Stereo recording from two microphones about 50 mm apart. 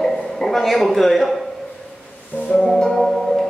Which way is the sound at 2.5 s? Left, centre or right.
Centre.